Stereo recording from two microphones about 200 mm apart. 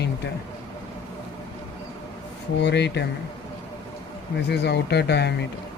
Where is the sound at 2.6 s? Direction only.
60° left (ahead or behind).